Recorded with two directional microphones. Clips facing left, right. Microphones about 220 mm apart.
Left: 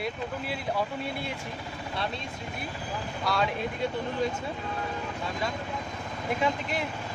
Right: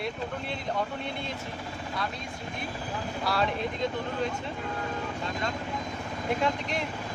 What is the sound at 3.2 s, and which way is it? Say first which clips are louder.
Speech: even; centre (ahead or behind).